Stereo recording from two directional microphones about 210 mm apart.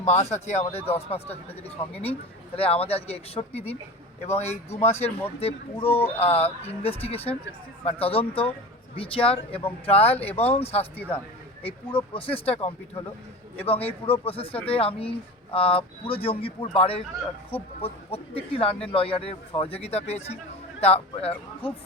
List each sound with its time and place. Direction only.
0.0 s speech: 30° left (ahead or behind)
10.9 s a man's voice: 10° left (ahead or behind)
11.6 s speech: 25° left (ahead or behind)